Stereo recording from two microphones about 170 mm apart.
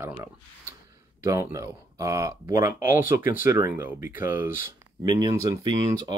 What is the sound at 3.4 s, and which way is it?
Speech, 15° right (ahead or behind).